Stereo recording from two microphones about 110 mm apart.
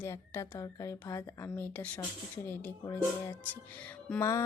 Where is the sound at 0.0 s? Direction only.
20° left (ahead or behind).